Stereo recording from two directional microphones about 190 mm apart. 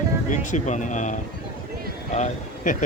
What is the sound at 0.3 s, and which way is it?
Speech, 40° left (ahead or behind).